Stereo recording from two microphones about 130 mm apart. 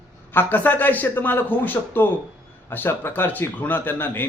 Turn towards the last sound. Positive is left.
turn(degrees=15)  # may be behind; listen again after turning